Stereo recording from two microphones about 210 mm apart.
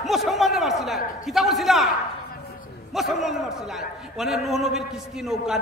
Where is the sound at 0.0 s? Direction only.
Centre (ahead or behind).